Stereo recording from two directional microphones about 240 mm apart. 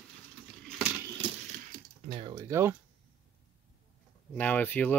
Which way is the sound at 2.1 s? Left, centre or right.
Centre.